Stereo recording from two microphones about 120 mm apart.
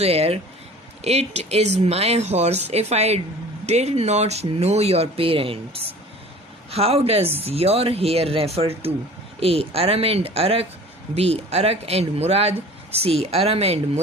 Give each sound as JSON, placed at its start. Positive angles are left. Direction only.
{"t": 0.0, "sound": "speech", "side_deg": -55}